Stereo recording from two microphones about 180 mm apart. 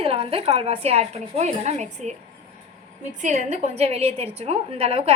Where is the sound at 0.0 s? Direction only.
30° right (ahead or behind).